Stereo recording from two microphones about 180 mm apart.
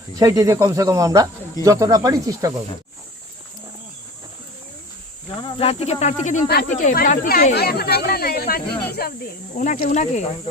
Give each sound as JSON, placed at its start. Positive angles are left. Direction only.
{"t": 0.2, "sound": "speech", "side_deg": -20}
{"t": 5.5, "sound": "speech", "side_deg": 35}
{"t": 9.6, "sound": "speech", "side_deg": 45}